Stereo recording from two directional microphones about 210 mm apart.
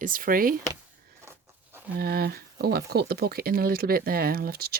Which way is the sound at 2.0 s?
45° right (ahead or behind).